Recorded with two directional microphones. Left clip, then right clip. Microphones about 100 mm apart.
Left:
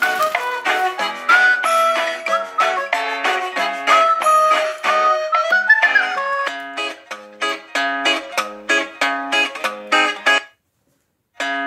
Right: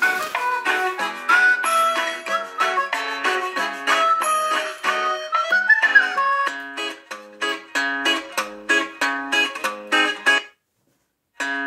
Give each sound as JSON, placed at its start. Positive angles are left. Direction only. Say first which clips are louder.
{"t": 0.0, "sound": "music", "louder": "left 3 dB", "side_deg": 30}